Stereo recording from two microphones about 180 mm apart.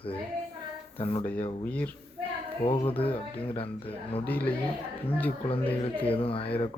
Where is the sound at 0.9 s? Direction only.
30° left (ahead or behind).